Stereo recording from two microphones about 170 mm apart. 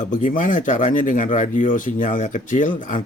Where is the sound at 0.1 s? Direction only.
50° left (ahead or behind).